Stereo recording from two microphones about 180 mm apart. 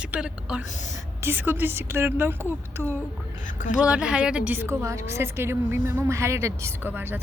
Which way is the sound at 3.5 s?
45° left (ahead or behind).